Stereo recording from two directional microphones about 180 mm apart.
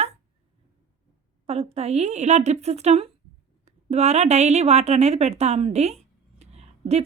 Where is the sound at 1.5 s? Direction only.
35° right (ahead or behind).